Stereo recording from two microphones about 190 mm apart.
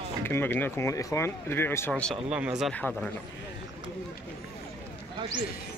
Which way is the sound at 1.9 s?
Centre (ahead or behind).